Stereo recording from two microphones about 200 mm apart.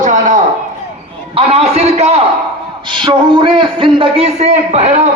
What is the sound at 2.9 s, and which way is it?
A man's voice, 25° right (ahead or behind).